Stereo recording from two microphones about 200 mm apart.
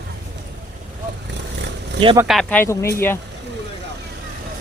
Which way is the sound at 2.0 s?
20° right (ahead or behind).